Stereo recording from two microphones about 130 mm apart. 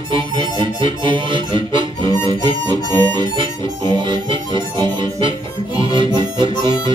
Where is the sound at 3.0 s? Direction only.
35° right (ahead or behind).